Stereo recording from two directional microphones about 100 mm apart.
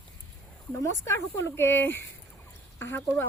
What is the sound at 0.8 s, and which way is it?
Speech, 25° left (ahead or behind).